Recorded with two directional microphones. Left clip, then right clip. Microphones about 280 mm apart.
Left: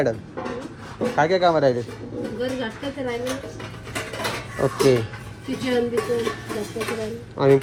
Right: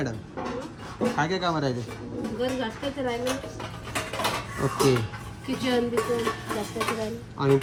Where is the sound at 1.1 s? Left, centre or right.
Centre.